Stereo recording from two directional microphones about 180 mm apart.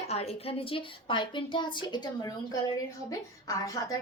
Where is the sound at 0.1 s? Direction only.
35° left (ahead or behind).